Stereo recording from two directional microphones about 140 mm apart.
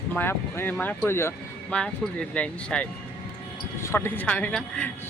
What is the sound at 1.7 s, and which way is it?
Speech, 5° left (ahead or behind).